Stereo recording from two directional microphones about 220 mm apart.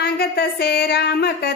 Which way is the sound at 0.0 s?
45° left (ahead or behind).